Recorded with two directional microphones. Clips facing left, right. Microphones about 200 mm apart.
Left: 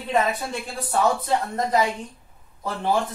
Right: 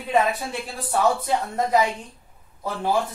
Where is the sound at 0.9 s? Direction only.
5° right (ahead or behind).